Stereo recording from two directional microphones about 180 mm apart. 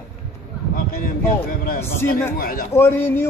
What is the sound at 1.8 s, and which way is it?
Speech, 15° left (ahead or behind).